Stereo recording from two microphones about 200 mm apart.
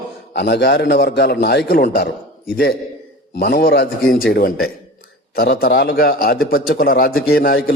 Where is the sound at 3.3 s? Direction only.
50° left (ahead or behind).